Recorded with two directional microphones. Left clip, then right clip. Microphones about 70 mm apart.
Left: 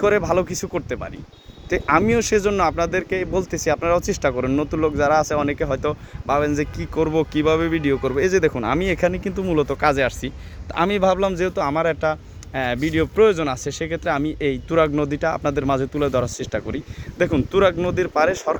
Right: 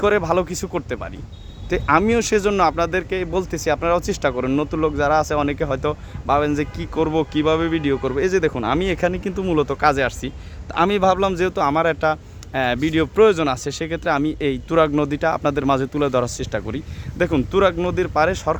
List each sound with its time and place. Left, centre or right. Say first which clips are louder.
0.0 s speech: even; centre
3.5 s a man's voice: even; centre
7.0 s speech: even; right
8.1 s speech: left 1 dB; centre
8.6 s a man's voice: even; centre
10.8 s speech: right 1 dB; right
11.3 s speech: right 2 dB; right
11.7 s speech: right 2 dB; right
15.7 s speech: right 1 dB; right
16.2 s speech: right 1 dB; centre
17.2 s a man's voice: even; centre